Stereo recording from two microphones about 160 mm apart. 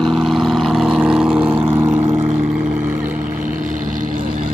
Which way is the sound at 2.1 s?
35° right (ahead or behind).